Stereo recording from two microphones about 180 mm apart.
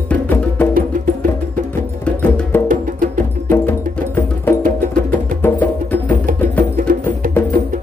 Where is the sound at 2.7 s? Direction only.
50° right (ahead or behind).